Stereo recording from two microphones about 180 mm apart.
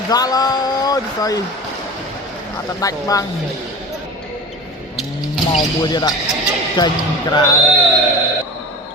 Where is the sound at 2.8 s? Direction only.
20° left (ahead or behind).